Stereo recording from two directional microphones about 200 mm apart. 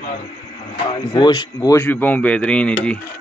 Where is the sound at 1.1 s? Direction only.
20° left (ahead or behind).